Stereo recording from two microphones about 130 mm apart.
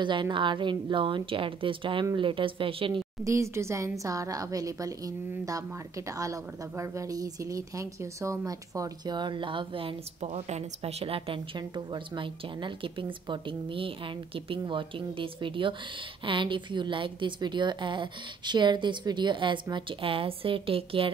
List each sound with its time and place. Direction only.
0.0 s a woman's voice: 40° right (ahead or behind)
3.3 s a woman's voice: 20° right (ahead or behind); by 21.1 s 45° right (ahead or behind)